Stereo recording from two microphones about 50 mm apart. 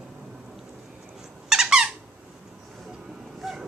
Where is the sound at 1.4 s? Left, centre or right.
Centre.